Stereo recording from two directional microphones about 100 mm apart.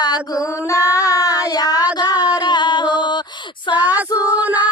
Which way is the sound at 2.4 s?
45° left (ahead or behind).